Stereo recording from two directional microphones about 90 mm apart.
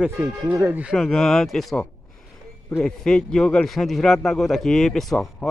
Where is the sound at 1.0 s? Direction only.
5° left (ahead or behind).